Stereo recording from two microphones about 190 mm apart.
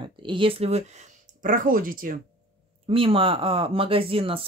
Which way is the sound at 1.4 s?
45° right (ahead or behind).